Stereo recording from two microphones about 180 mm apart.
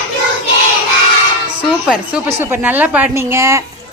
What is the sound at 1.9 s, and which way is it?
A woman's voice, 10° right (ahead or behind).